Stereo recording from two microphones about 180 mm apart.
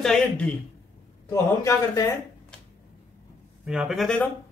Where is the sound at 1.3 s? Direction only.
20° left (ahead or behind).